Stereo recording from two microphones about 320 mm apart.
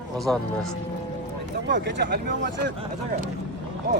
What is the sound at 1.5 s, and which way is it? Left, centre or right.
Speech, right.